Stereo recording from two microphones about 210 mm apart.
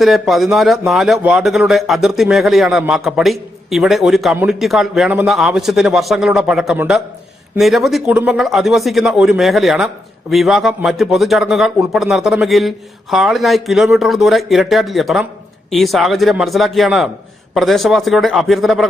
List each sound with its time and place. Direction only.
0.0 s speech: centre (ahead or behind)